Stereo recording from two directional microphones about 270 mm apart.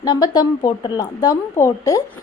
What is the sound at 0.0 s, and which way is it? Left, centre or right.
A woman's voice, centre.